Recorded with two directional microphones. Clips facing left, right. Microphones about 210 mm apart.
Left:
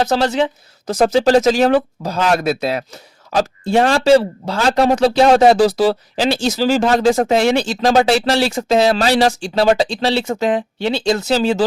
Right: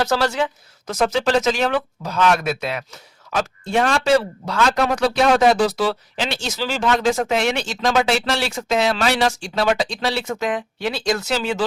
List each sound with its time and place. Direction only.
0.0 s speech: 20° left (ahead or behind)